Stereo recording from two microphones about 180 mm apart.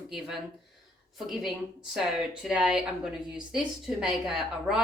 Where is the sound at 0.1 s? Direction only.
Centre (ahead or behind).